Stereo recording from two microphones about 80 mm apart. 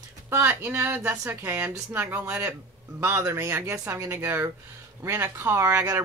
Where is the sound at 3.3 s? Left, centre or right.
Right.